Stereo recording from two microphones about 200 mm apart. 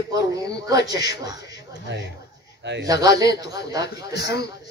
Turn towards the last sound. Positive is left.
turn(degrees=55)  # may be behind; listen again after turning